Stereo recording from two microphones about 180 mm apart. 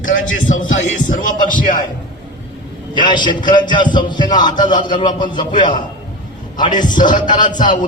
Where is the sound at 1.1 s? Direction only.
45° left (ahead or behind).